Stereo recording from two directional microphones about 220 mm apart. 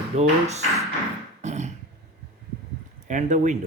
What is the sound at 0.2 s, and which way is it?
Speech, 30° right (ahead or behind).